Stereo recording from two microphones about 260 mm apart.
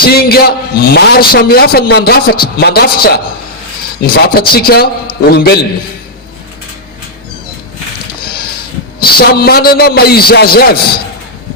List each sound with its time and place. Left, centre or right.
0.0 s a man's voice: left
9.0 s a man's voice: left